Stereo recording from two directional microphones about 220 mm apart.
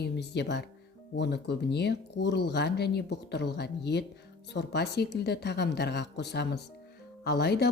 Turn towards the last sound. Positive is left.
turn(degrees=50)  # may be behind; listen again after turning